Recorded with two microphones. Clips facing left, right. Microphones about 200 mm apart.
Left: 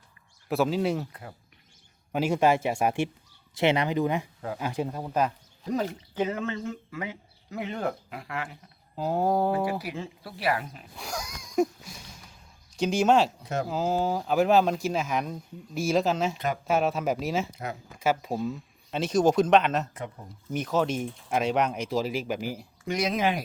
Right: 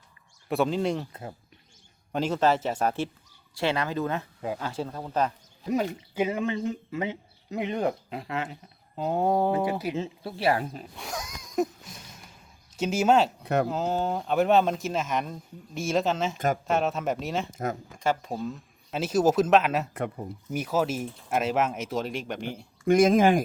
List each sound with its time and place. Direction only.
0.4 s speech: centre (ahead or behind)
2.1 s speech: 10° left (ahead or behind)
6.1 s speech: 10° right (ahead or behind)
9.0 s speech: centre (ahead or behind)
9.6 s speech: 20° right (ahead or behind)
10.9 s a sound: centre (ahead or behind)
12.7 s speech: 5° right (ahead or behind)
13.4 s speech: 60° right (ahead or behind)
13.7 s speech: centre (ahead or behind)
19.9 s speech: 60° right (ahead or behind)
20.5 s speech: 5° right (ahead or behind)
22.9 s speech: 50° right (ahead or behind)